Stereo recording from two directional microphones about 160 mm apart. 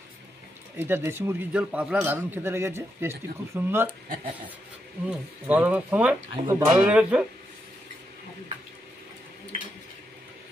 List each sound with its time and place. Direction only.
0.7 s a man's voice: 15° right (ahead or behind)
5.0 s a man's voice: 10° right (ahead or behind)
6.4 s speech: 20° right (ahead or behind)
6.7 s a man's voice: 5° right (ahead or behind)